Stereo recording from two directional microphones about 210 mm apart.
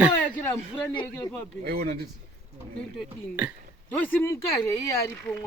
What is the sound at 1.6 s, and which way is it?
Speech, 45° right (ahead or behind).